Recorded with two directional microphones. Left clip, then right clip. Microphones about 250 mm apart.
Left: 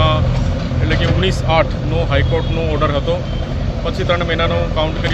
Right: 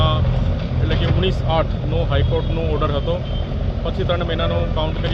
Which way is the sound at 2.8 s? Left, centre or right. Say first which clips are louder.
Left 6 dB; centre.